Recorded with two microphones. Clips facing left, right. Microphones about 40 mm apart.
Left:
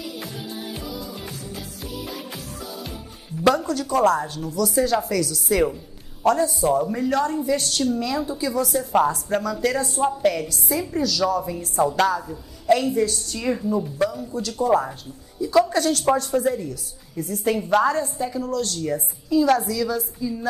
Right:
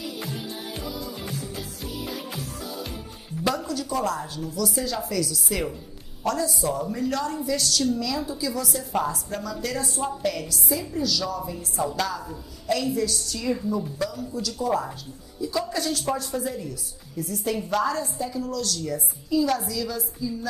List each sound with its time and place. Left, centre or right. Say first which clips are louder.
0.2 s music: left 1 dB; centre
3.4 s a woman's voice: left 7 dB; left
6.2 s a woman's voice: left 6 dB; left
15.4 s a woman's voice: left 8 dB; left
17.2 s a woman's voice: left 4 dB; left